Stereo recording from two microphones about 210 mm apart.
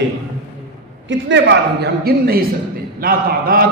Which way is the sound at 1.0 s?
60° right (ahead or behind).